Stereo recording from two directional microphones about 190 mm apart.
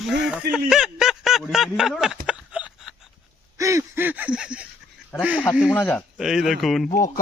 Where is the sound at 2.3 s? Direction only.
5° right (ahead or behind).